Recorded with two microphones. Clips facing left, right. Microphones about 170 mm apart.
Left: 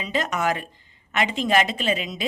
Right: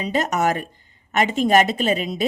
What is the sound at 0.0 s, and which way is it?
Speech, 40° right (ahead or behind).